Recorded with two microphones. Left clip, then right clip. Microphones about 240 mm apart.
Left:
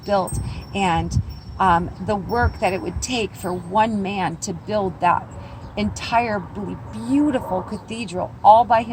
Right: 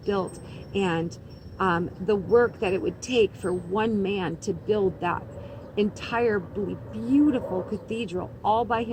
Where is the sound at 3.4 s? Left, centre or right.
Left.